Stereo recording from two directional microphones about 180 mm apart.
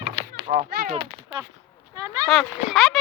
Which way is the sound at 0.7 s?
55° right (ahead or behind).